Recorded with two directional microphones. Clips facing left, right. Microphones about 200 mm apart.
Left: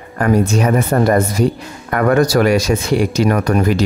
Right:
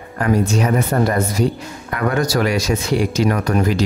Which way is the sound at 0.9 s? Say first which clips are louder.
Left 4 dB; 55° left (ahead or behind).